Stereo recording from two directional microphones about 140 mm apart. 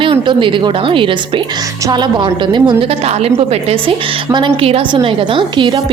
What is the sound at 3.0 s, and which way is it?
A woman's voice, 50° right (ahead or behind).